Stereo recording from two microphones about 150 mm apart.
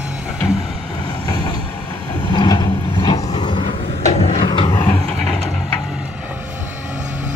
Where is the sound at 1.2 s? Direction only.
25° left (ahead or behind); by 4.4 s 45° left (ahead or behind).